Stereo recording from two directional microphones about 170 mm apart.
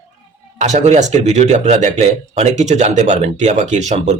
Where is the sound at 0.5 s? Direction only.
45° right (ahead or behind).